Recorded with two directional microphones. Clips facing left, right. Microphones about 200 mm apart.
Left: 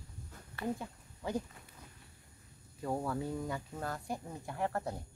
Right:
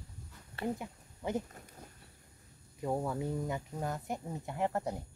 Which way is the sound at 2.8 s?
15° right (ahead or behind).